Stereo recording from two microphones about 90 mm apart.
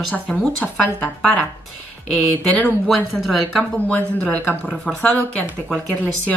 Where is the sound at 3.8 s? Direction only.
10° left (ahead or behind).